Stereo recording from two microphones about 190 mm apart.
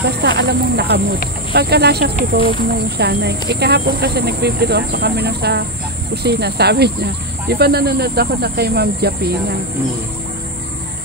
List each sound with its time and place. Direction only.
0.0 s speech: 60° right (ahead or behind)